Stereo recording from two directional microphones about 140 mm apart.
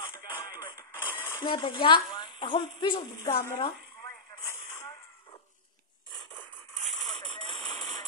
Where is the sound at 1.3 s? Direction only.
35° left (ahead or behind).